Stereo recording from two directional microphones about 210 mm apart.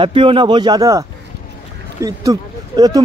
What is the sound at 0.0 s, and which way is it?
Speech, 25° right (ahead or behind).